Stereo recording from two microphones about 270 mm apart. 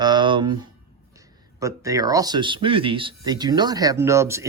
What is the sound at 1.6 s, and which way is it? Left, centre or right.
A man's voice, centre.